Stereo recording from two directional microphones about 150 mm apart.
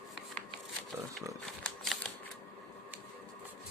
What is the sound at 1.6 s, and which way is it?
Typewriter, 5° left (ahead or behind).